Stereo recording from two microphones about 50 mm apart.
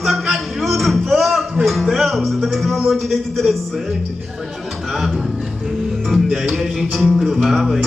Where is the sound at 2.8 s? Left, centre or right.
Centre.